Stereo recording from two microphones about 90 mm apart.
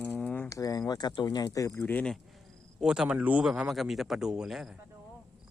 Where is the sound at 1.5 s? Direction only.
40° left (ahead or behind).